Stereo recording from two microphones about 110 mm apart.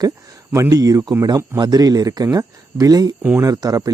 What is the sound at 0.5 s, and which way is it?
Speech, 30° right (ahead or behind).